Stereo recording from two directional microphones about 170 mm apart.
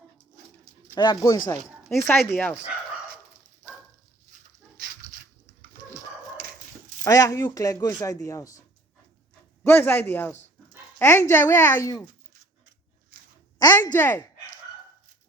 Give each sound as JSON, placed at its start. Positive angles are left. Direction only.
{"t": 0.9, "sound": "speech", "side_deg": 25}
{"t": 1.8, "sound": "speech", "side_deg": 0}
{"t": 2.2, "sound": "speech", "side_deg": 10}
{"t": 6.4, "sound": "dog", "side_deg": -60}
{"t": 7.0, "sound": "speech", "side_deg": 20}
{"t": 9.6, "sound": "speech", "side_deg": 10}
{"t": 13.6, "sound": "speech", "side_deg": 20}